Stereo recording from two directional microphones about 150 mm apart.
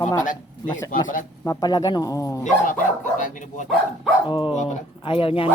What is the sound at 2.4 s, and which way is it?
Speech, 60° left (ahead or behind).